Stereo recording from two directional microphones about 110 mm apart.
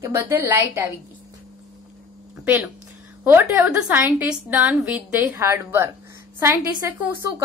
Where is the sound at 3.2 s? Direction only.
15° right (ahead or behind).